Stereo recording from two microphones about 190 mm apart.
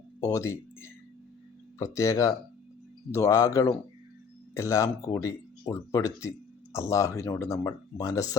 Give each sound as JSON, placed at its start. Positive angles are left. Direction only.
{"t": 0.2, "sound": "speech", "side_deg": 15}